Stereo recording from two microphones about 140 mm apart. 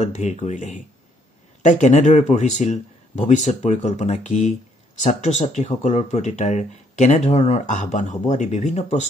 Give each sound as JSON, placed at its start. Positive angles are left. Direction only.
{"t": 0.0, "sound": "speech", "side_deg": 55}